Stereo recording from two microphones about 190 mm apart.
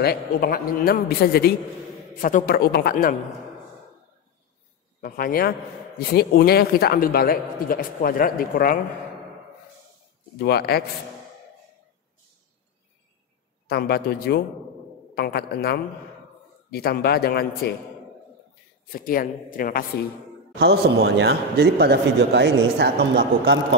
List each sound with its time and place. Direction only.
0.0 s speech: 55° left (ahead or behind)
5.0 s speech: 50° left (ahead or behind)
10.4 s a man's voice: 55° left (ahead or behind)
13.7 s a man's voice: 55° left (ahead or behind)
18.9 s speech: 50° left (ahead or behind)
20.5 s a man's voice: 60° right (ahead or behind)